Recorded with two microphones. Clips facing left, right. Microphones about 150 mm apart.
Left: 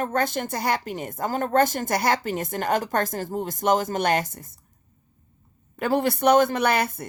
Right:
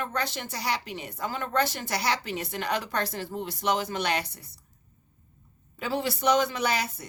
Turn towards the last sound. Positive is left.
turn(degrees=55)  # may be behind; listen again after turning